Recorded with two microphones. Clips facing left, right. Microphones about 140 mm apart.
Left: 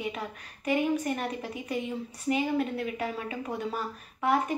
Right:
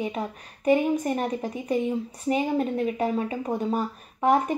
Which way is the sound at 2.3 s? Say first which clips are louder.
Right 3 dB; 35° right (ahead or behind).